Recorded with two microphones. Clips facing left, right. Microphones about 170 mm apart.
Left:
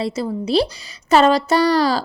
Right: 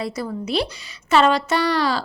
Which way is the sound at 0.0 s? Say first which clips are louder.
Left 4 dB; 25° left (ahead or behind).